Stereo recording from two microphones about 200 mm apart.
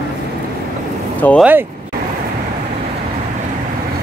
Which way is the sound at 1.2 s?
5° left (ahead or behind).